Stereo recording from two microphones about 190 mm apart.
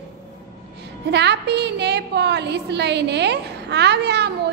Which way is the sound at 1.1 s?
60° right (ahead or behind).